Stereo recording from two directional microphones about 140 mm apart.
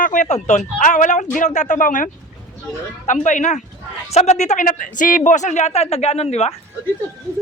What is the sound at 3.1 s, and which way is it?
Speech, 60° left (ahead or behind).